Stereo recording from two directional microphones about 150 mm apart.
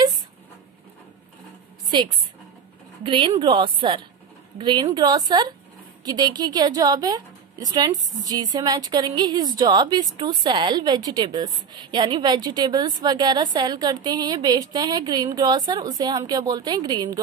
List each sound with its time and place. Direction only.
1.9 s a woman's voice: 30° right (ahead or behind)